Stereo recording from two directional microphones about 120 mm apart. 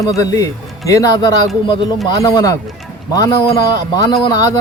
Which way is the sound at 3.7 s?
35° left (ahead or behind).